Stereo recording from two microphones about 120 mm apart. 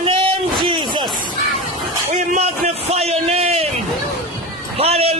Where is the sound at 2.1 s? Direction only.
90° right.